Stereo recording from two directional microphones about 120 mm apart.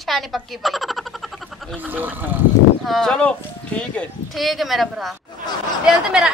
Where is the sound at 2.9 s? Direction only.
5° left (ahead or behind).